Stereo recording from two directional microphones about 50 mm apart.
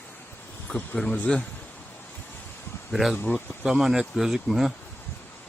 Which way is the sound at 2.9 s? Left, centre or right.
Centre.